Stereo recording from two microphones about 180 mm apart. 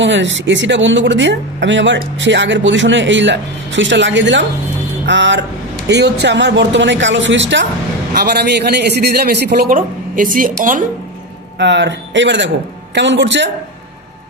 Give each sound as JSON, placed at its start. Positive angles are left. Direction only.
{"t": 0.0, "sound": "a man's voice", "side_deg": -90}
{"t": 5.9, "sound": "speech", "side_deg": -70}
{"t": 8.1, "sound": "a man's voice", "side_deg": -60}
{"t": 11.5, "sound": "speech", "side_deg": -80}